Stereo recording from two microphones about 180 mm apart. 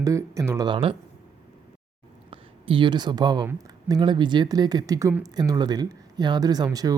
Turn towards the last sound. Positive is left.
turn(degrees=-20)  # may be behind; listen again after turning